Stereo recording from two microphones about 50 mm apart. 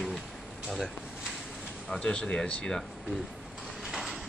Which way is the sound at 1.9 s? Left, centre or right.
Centre.